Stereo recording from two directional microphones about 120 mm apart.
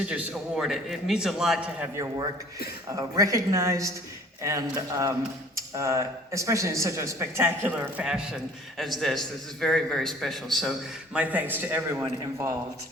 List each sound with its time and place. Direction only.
0.0 s a man's voice: 10° right (ahead or behind)
3.2 s a man's voice: 30° right (ahead or behind); by 11.2 s centre (ahead or behind)
11.2 s a man's voice: 15° right (ahead or behind)